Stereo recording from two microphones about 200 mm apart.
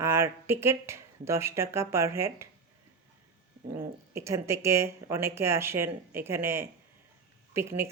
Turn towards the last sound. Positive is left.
turn(degrees=-15)  # may be behind; listen again after turning